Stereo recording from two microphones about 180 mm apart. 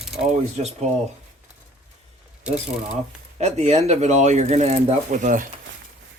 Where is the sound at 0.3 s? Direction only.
40° right (ahead or behind).